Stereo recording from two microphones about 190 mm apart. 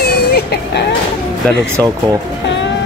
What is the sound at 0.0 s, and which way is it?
Vehicle, 55° left (ahead or behind).